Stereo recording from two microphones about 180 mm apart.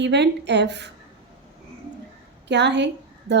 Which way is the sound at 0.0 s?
75° right (ahead or behind).